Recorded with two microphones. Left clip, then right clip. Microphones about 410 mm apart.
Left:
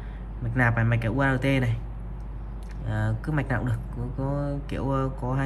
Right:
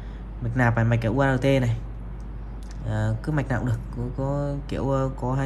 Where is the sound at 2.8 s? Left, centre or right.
Centre.